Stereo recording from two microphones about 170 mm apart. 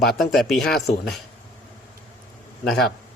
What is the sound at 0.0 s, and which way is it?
Speech, centre (ahead or behind).